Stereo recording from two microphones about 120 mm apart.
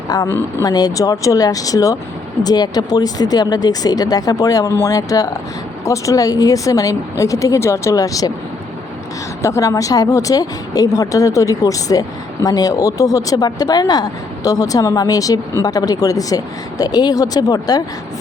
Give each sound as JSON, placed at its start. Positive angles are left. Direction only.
{"t": 0.6, "sound": "a woman's voice", "side_deg": 35}
{"t": 9.4, "sound": "speech", "side_deg": 25}